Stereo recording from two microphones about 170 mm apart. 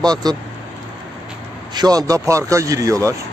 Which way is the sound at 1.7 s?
25° right (ahead or behind).